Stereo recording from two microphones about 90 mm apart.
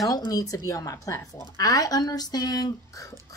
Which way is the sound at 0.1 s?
40° left (ahead or behind).